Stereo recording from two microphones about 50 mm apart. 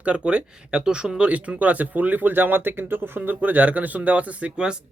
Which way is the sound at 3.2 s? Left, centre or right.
Right.